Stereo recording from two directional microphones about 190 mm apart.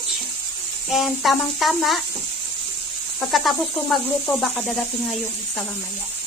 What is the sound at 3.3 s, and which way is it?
Speech, centre (ahead or behind).